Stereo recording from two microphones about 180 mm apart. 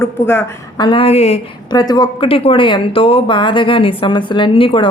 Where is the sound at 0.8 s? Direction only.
30° left (ahead or behind).